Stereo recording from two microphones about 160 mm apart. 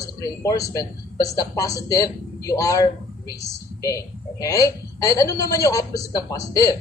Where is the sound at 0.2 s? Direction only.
20° left (ahead or behind).